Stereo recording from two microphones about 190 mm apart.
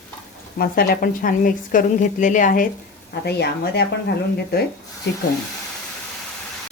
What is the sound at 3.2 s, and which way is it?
Speech, 60° left (ahead or behind).